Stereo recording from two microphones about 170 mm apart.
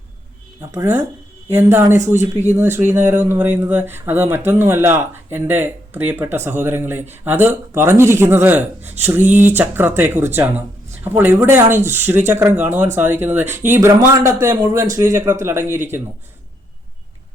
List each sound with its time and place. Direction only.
1.5 s speech: 15° right (ahead or behind)